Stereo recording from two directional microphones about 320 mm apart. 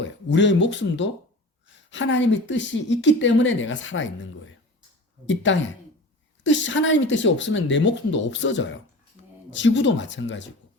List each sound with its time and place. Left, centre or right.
0.0 s a woman's voice: left